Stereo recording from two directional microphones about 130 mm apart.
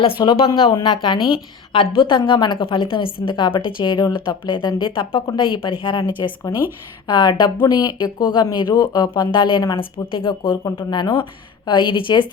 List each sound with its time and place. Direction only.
0.0 s speech: 40° left (ahead or behind)